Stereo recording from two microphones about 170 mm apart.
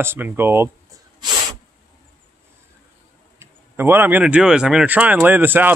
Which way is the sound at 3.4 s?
15° right (ahead or behind).